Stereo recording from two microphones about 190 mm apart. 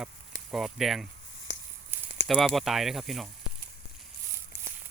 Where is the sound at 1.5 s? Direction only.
65° left (ahead or behind).